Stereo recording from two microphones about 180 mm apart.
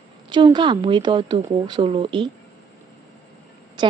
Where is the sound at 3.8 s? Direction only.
25° right (ahead or behind).